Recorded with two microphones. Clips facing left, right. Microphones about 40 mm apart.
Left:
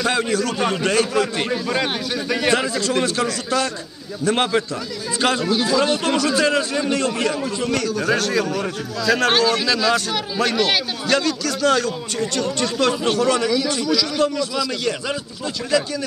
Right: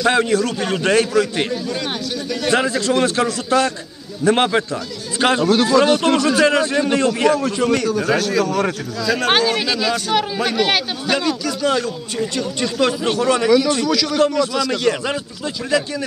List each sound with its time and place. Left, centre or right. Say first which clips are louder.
0.0 s a man's voice: right 4 dB; centre
1.1 s a man's voice: right 2 dB; left
2.5 s a man's voice: right 7 dB; right
5.5 s a man's voice: right 5 dB; right
8.0 s a man's voice: right 2 dB; centre
9.4 s a man's voice: even; centre
12.8 s a man's voice: right 1 dB; centre
13.7 s a man's voice: right 3 dB; right